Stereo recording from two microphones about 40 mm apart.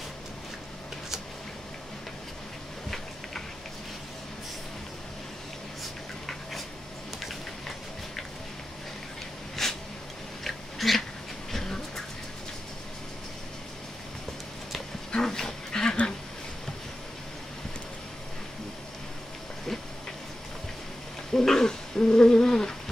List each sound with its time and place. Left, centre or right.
9.6 s a sound: centre
11.5 s dog: centre
15.2 s dog: centre
21.3 s owl: centre